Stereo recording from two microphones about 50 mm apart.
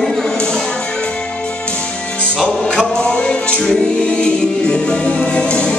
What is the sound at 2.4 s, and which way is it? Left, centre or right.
Music, left.